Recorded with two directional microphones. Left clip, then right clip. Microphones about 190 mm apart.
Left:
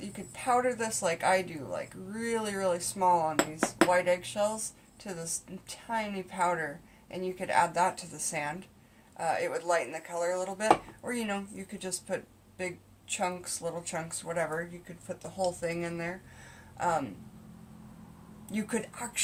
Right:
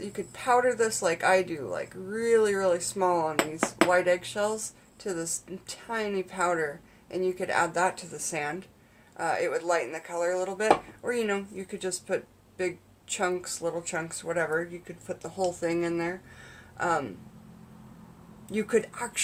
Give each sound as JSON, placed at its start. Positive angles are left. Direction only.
{"t": 0.0, "sound": "speech", "side_deg": -30}
{"t": 3.3, "sound": "speech", "side_deg": 5}
{"t": 3.8, "sound": "speech", "side_deg": -30}
{"t": 15.6, "sound": "speech", "side_deg": -35}
{"t": 18.5, "sound": "speech", "side_deg": -30}